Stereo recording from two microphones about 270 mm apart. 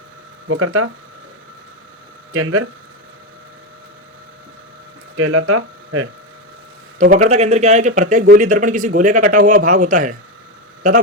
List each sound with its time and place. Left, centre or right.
0.4 s speech: right
2.3 s speech: right
5.1 s speech: right
7.3 s speech: right